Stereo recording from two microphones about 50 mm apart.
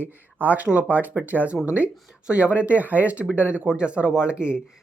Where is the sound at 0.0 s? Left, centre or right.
Right.